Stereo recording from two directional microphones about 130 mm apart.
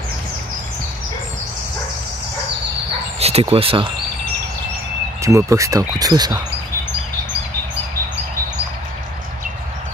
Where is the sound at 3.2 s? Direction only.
50° right (ahead or behind).